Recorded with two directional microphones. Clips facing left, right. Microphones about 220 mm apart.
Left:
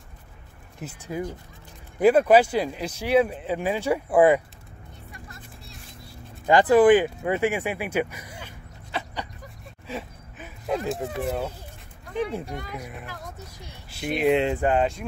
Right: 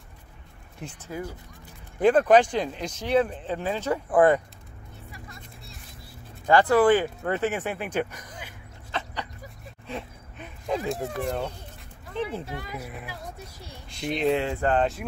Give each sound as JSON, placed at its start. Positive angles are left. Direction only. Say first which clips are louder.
{"t": 0.7, "sound": "speech", "louder": "left 3 dB", "side_deg": 5}
{"t": 5.1, "sound": "vehicle", "louder": "left 1 dB", "side_deg": 0}
{"t": 6.4, "sound": "speech", "louder": "left 3 dB", "side_deg": 15}
{"t": 8.9, "sound": "a sound", "louder": "left 1 dB", "side_deg": 10}
{"t": 12.1, "sound": "speech", "louder": "left 3 dB", "side_deg": 15}
{"t": 12.4, "sound": "speech", "louder": "left 1 dB", "side_deg": -5}
{"t": 13.8, "sound": "a sound", "louder": "left 2 dB", "side_deg": 5}
{"t": 14.3, "sound": "speech", "louder": "left 3 dB", "side_deg": 15}